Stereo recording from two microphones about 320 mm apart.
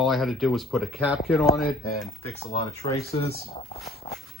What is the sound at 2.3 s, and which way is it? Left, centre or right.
Speech, centre.